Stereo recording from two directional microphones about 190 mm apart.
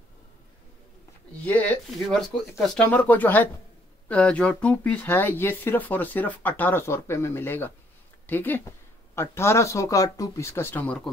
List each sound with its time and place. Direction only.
1.4 s speech: 10° left (ahead or behind)